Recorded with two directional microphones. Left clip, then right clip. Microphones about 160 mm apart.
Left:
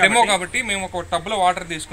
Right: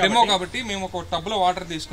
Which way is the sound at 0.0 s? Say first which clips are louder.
Left 3 dB; 15° left (ahead or behind).